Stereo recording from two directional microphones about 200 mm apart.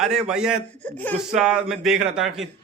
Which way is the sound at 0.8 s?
10° left (ahead or behind).